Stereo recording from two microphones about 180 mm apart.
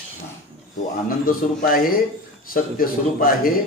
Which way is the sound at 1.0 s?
50° left (ahead or behind).